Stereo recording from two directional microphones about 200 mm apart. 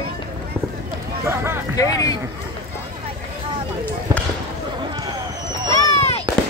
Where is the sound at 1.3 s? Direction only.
10° right (ahead or behind).